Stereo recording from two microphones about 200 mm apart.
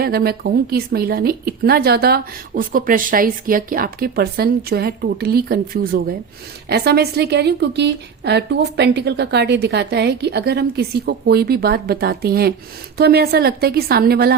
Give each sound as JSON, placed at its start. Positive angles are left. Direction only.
{"t": 0.0, "sound": "a woman's voice", "side_deg": -50}